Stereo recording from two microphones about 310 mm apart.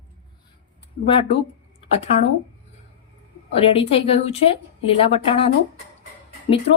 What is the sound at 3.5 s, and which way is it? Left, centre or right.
Speech, centre.